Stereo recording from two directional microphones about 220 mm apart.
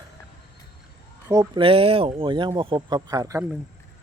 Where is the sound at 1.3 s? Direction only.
20° right (ahead or behind).